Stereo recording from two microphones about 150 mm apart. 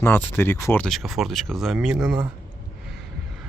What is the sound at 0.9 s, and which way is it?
Speech, centre (ahead or behind).